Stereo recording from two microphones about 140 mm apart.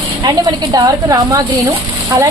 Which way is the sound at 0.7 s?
25° right (ahead or behind).